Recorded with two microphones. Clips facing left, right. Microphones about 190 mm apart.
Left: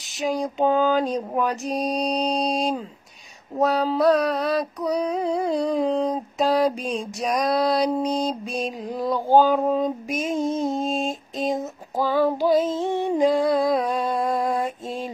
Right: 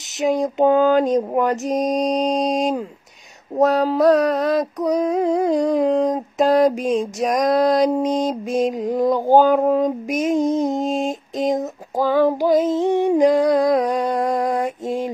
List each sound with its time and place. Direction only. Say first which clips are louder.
0.2 s female singing: right 5 dB; 20° right (ahead or behind)